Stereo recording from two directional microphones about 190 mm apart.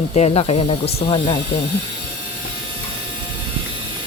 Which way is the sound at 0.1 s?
35° left (ahead or behind).